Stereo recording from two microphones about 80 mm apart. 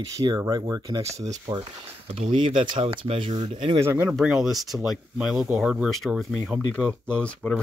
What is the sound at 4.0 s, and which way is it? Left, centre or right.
Speech, centre.